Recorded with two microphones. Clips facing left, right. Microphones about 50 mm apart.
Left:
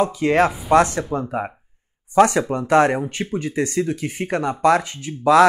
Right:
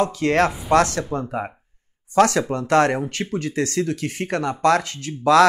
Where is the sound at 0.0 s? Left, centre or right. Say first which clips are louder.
Left 2 dB; centre.